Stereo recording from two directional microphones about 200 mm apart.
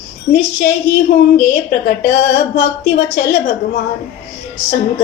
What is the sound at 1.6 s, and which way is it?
Speech, 50° left (ahead or behind).